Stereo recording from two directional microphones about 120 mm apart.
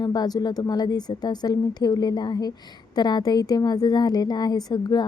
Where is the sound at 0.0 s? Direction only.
35° left (ahead or behind).